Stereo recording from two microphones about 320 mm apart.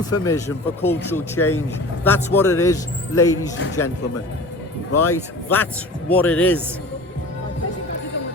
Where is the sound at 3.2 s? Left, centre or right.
Centre.